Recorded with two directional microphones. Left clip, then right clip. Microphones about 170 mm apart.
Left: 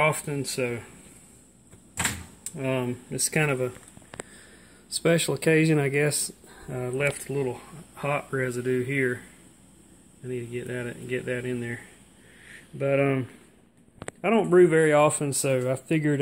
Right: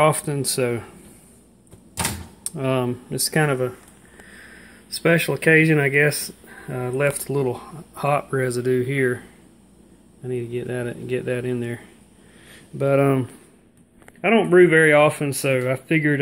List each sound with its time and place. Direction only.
0.0 s speech: 10° right (ahead or behind)
2.4 s speech: 10° right (ahead or behind)
3.3 s speech: 5° left (ahead or behind)
4.2 s a sound: centre (ahead or behind)
5.0 s speech: centre (ahead or behind)
7.1 s speech: 20° right (ahead or behind)
10.2 s speech: 10° right (ahead or behind)
14.2 s speech: 5° left (ahead or behind)